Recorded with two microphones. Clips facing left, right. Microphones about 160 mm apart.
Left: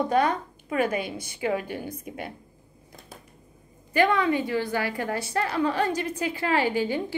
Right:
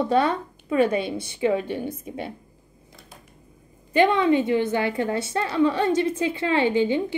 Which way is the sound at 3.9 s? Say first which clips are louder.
Right 4 dB; 25° right (ahead or behind).